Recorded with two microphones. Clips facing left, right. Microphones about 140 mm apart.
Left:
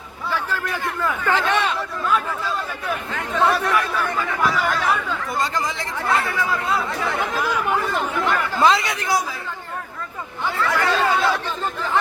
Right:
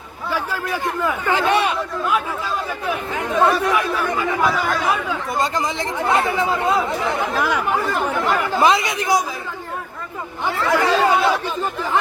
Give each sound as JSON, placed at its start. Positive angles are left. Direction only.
{"t": 0.3, "sound": "a man's voice", "side_deg": -10}
{"t": 3.3, "sound": "a man's voice", "side_deg": -10}
{"t": 4.4, "sound": "speech", "side_deg": 0}
{"t": 4.9, "sound": "speech", "side_deg": -15}
{"t": 8.3, "sound": "a man's voice", "side_deg": -15}
{"t": 10.4, "sound": "a man's voice", "side_deg": -20}